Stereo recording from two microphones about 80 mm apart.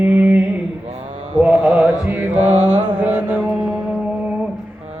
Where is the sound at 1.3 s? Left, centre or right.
Centre.